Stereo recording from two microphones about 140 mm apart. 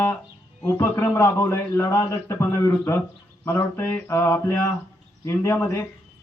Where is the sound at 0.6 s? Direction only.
15° left (ahead or behind).